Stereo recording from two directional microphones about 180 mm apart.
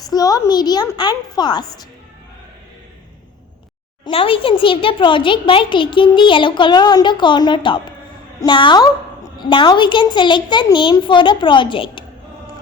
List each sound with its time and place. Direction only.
0.1 s a child's voice: 20° left (ahead or behind)
4.0 s a child's voice: 30° left (ahead or behind)